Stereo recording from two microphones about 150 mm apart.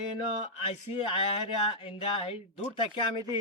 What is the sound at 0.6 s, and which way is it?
Speech, 40° left (ahead or behind).